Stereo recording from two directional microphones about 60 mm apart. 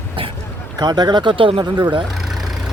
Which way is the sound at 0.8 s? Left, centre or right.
Right.